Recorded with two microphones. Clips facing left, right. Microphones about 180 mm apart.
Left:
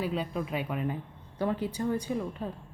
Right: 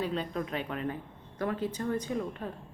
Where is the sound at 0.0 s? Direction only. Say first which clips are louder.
Left 1 dB; 10° left (ahead or behind).